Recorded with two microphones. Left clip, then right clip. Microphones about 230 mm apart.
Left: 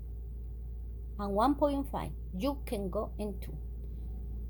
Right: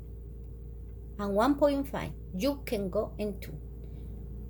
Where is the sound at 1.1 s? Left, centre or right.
Centre.